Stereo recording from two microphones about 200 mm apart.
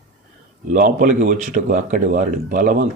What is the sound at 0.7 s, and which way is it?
A man's voice, 40° right (ahead or behind).